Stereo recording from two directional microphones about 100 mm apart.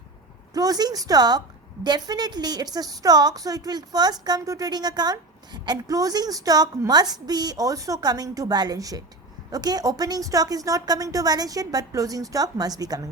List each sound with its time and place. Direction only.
0.5 s a woman's voice: 40° right (ahead or behind)